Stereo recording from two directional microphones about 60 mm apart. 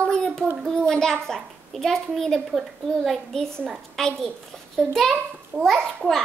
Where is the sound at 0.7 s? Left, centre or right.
Centre.